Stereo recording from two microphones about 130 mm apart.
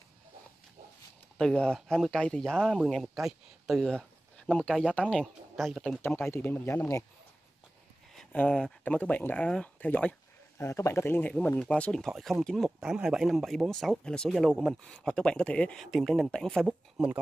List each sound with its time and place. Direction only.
1.4 s speech: 5° left (ahead or behind)
6.0 s speech: 15° left (ahead or behind)
8.2 s speech: 10° left (ahead or behind)
10.6 s speech: 20° left (ahead or behind); by 16.6 s 5° left (ahead or behind)
16.6 s speech: 10° right (ahead or behind)